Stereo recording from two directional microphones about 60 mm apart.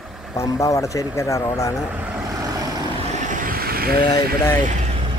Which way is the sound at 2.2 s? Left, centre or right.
Right.